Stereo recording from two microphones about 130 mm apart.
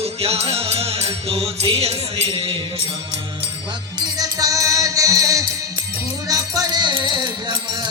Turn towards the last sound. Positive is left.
turn(degrees=-35)  # may be behind; listen again after turning